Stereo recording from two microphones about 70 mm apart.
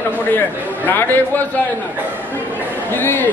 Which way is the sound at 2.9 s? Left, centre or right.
Left.